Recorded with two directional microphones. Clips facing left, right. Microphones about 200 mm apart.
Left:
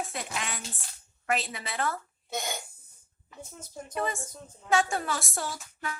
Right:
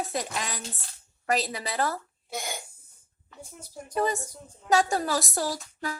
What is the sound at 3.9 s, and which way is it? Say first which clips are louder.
A woman's voice: right 5 dB; 40° right (ahead or behind).